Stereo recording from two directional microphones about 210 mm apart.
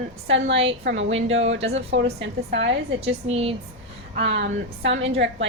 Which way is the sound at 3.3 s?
30° right (ahead or behind).